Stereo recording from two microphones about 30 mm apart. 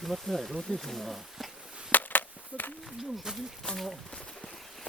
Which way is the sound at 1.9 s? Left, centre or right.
Left.